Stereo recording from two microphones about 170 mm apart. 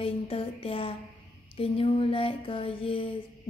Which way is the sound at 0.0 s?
35° left (ahead or behind).